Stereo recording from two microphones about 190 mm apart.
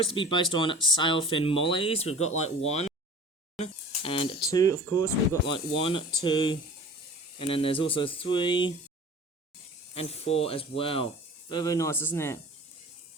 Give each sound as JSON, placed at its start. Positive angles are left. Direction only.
{"t": 0.0, "sound": "speech", "side_deg": 25}
{"t": 4.5, "sound": "speech", "side_deg": 15}
{"t": 5.5, "sound": "speech", "side_deg": 25}
{"t": 9.9, "sound": "speech", "side_deg": 30}